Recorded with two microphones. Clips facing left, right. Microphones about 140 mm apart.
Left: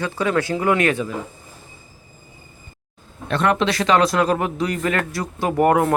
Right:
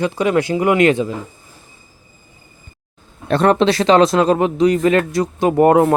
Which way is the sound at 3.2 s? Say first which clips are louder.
Right 6 dB; 35° right (ahead or behind).